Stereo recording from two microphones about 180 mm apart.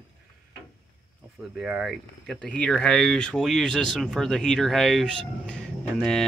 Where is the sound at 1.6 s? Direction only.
5° right (ahead or behind).